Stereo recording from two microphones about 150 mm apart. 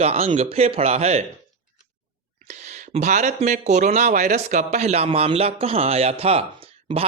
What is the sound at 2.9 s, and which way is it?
Speech, 50° right (ahead or behind).